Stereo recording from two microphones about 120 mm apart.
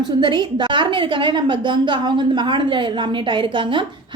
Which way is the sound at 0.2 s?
40° right (ahead or behind).